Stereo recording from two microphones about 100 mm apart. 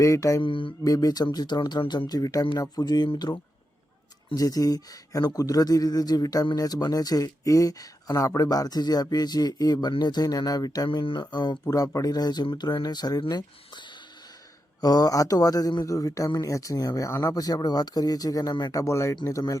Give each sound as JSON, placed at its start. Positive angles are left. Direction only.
{"t": 0.0, "sound": "speech", "side_deg": 30}
{"t": 0.4, "sound": "speech", "side_deg": 60}
{"t": 0.9, "sound": "speech", "side_deg": 40}
{"t": 4.4, "sound": "speech", "side_deg": 35}
{"t": 10.8, "sound": "speech", "side_deg": 60}
{"t": 11.6, "sound": "speech", "side_deg": 35}
{"t": 14.8, "sound": "speech", "side_deg": 40}